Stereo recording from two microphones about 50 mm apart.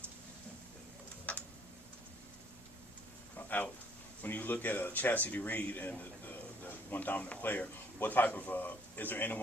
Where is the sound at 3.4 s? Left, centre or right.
Left.